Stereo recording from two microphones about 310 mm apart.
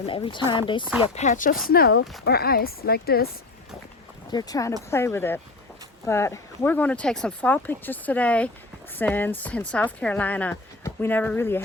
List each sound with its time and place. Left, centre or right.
0.0 s speech: centre
4.3 s speech: centre